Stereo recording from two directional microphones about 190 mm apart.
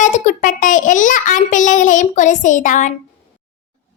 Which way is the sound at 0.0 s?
40° left (ahead or behind).